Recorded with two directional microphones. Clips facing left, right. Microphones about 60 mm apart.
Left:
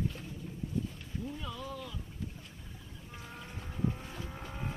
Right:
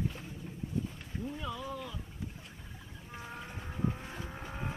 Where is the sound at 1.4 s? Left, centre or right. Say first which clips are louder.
Right 2 dB; centre.